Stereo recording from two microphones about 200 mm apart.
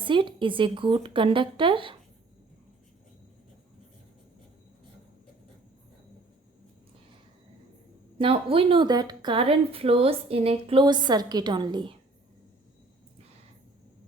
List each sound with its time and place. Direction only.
0.0 s a woman's voice: 25° right (ahead or behind)
8.2 s a woman's voice: 25° right (ahead or behind)